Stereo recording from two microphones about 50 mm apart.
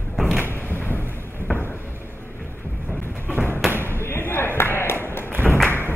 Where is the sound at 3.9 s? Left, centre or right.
Left.